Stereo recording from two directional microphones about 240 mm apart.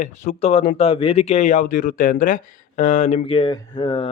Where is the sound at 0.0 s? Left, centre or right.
Left.